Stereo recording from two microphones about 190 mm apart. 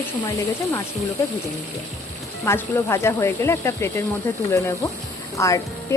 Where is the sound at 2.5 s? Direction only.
15° left (ahead or behind).